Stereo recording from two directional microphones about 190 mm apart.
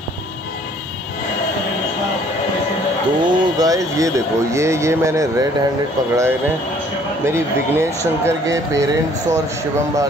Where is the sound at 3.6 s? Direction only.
20° right (ahead or behind).